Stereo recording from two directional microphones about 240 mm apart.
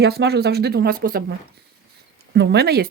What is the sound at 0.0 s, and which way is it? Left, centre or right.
Speech, right.